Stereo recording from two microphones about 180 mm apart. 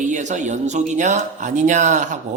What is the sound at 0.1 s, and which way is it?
A man's voice, 40° right (ahead or behind).